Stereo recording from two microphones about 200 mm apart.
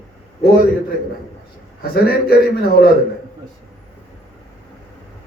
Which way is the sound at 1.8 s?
50° left (ahead or behind).